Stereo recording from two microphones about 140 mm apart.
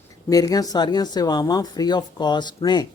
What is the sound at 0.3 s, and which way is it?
Speech, 25° left (ahead or behind).